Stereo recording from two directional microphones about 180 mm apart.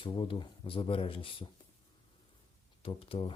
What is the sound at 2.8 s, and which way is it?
Speech, 30° left (ahead or behind).